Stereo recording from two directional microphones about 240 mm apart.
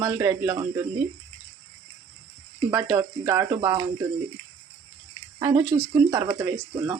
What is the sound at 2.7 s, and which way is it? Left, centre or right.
Speech, centre.